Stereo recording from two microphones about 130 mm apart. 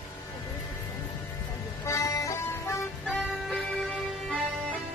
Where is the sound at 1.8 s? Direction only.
25° left (ahead or behind).